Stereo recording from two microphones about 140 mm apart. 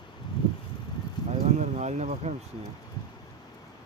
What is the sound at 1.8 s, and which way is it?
Speech, 55° right (ahead or behind).